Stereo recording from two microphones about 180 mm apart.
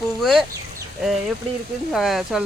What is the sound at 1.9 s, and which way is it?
Speech, centre (ahead or behind).